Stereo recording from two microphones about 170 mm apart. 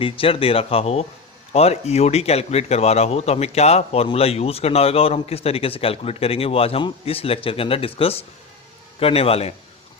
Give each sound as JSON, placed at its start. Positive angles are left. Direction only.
{"t": 0.0, "sound": "speech", "side_deg": 35}